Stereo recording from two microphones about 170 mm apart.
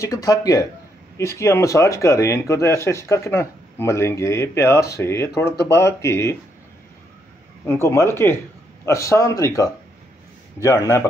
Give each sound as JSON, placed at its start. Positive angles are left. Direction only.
{"t": 0.0, "sound": "speech", "side_deg": 20}
{"t": 7.6, "sound": "speech", "side_deg": 15}